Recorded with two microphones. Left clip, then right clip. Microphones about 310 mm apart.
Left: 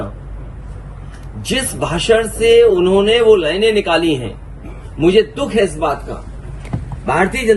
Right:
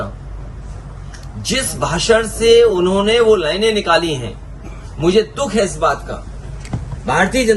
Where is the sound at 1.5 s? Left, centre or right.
Right.